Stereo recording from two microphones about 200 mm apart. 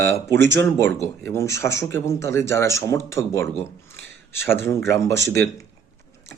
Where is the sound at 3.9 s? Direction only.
60° right (ahead or behind).